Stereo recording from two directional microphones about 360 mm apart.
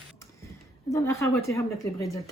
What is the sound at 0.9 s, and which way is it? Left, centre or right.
A woman's voice, centre.